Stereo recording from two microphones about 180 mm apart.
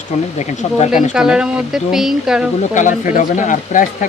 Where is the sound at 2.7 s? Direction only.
45° left (ahead or behind).